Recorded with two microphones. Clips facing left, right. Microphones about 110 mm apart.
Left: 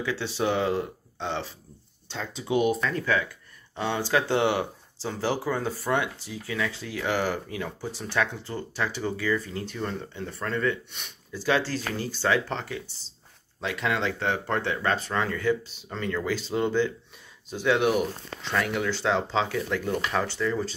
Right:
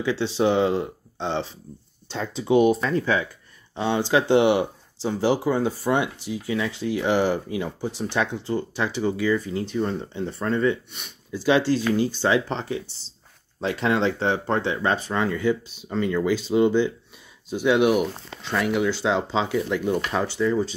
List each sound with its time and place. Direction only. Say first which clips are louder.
0.0 s speech: right 6 dB; 25° right (ahead or behind)